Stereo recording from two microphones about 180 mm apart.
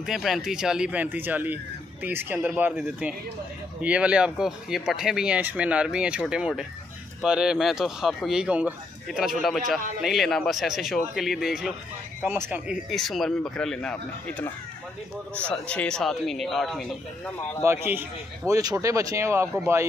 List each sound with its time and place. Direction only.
0.0 s speech: centre (ahead or behind)
17.6 s speech: 10° right (ahead or behind)